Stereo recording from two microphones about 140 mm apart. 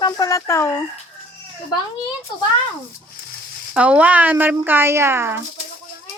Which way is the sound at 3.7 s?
10° right (ahead or behind).